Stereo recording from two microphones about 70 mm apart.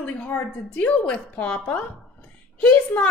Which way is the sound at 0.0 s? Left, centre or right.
Centre.